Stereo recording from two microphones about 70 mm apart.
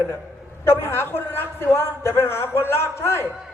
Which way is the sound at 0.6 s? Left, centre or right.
Left.